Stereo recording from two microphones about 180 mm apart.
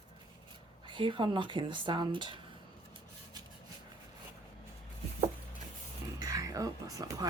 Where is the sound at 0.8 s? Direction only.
25° right (ahead or behind).